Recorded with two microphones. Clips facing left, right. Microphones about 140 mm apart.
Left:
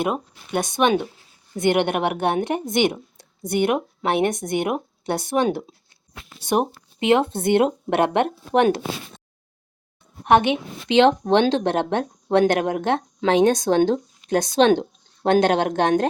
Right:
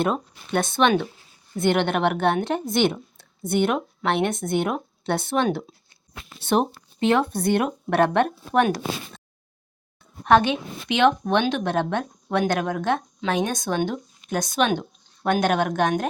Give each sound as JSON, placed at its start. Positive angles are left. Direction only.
{"t": 0.0, "sound": "speech", "side_deg": 10}
{"t": 10.2, "sound": "a woman's voice", "side_deg": 20}